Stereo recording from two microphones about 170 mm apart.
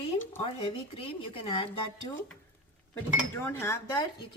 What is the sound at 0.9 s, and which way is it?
Speech, 35° left (ahead or behind).